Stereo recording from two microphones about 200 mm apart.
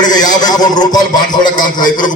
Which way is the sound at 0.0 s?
20° left (ahead or behind).